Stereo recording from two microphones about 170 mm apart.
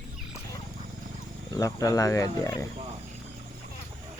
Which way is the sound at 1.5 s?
20° left (ahead or behind).